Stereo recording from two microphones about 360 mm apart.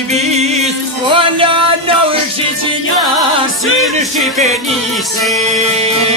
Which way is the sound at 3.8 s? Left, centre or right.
Centre.